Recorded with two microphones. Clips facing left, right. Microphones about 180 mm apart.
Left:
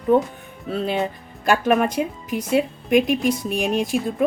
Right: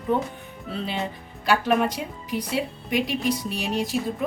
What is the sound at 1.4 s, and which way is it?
A woman's voice, 50° left (ahead or behind).